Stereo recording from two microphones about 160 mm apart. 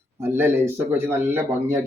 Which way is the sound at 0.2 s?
15° right (ahead or behind).